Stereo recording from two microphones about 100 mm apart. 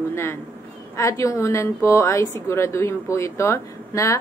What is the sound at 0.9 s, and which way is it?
A woman's voice, 30° left (ahead or behind).